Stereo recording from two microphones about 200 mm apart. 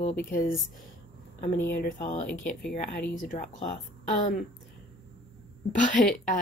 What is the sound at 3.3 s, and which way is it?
Speech, 40° left (ahead or behind).